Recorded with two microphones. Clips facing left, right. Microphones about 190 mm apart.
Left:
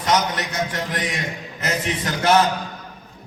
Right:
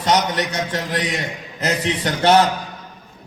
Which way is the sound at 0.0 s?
35° right (ahead or behind).